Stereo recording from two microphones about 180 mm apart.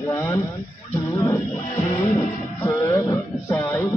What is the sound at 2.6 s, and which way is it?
Wail, 15° left (ahead or behind).